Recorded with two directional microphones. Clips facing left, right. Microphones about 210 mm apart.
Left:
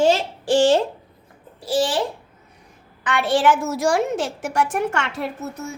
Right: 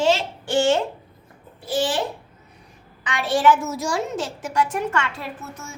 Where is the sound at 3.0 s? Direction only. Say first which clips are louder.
Left 1 dB; 55° left (ahead or behind).